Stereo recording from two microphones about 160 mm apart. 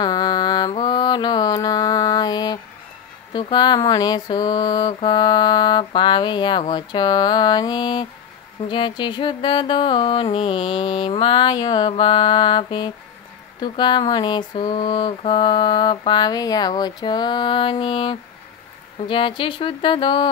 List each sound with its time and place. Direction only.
0.0 s mantra: 25° left (ahead or behind)
18.9 s speech: 30° left (ahead or behind)